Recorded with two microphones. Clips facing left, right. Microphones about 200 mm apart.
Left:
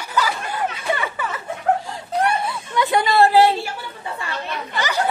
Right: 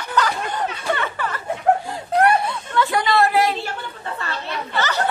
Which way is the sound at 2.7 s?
20° left (ahead or behind).